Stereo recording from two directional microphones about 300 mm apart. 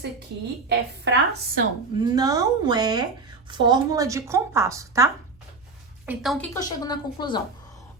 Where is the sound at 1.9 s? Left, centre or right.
Centre.